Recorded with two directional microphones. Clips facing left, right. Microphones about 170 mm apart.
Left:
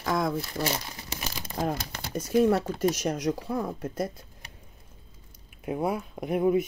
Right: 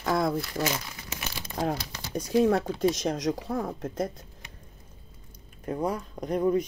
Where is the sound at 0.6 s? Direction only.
35° left (ahead or behind).